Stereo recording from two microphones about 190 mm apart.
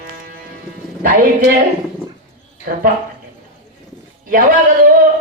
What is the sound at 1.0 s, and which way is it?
Music, 45° right (ahead or behind).